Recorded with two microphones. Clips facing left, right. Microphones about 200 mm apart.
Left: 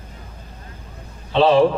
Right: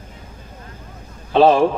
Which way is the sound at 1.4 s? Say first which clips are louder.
Right 2 dB; 45° right (ahead or behind).